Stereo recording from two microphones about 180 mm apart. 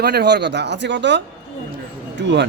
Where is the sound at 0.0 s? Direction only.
65° right (ahead or behind).